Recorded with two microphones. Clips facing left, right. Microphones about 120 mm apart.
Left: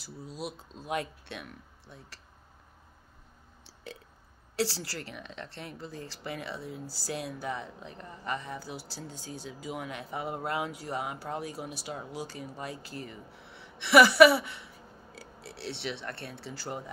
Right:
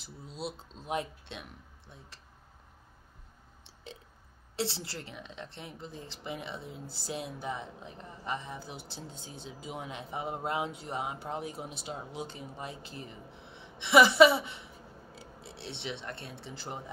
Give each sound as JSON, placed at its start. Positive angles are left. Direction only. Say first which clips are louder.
{"t": 0.0, "sound": "a woman's voice", "louder": "left 1 dB", "side_deg": -20}
{"t": 3.6, "sound": "burping", "louder": "left 3 dB", "side_deg": -20}
{"t": 4.6, "sound": "a woman's voice", "louder": "left 3 dB", "side_deg": -20}